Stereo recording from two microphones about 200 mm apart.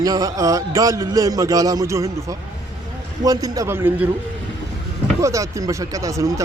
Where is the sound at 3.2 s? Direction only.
15° right (ahead or behind).